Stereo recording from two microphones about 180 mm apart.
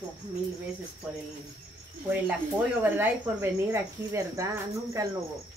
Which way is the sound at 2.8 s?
10° right (ahead or behind).